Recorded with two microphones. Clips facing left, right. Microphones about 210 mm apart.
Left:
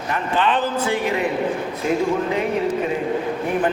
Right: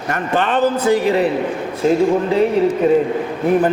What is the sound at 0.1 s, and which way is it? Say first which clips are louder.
A man's voice: right 3 dB; 45° right (ahead or behind).